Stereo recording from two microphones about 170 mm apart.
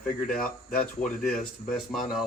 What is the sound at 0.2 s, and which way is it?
Speech, 55° left (ahead or behind).